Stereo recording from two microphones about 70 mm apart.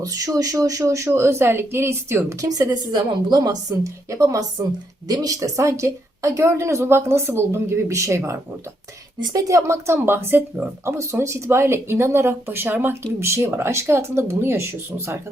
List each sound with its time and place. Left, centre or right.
0.0 s a woman's voice: right
2.5 s a woman's voice: right
3.3 s a woman's voice: right
9.2 s speech: right
10.9 s speech: right
13.1 s speech: right